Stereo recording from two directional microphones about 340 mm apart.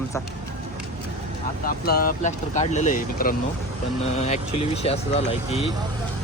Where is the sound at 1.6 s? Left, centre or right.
Left.